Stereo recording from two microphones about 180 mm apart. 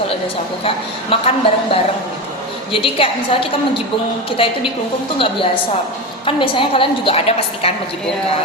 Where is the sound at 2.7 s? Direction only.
30° left (ahead or behind).